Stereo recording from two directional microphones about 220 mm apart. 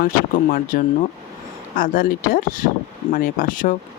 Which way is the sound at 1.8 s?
40° left (ahead or behind).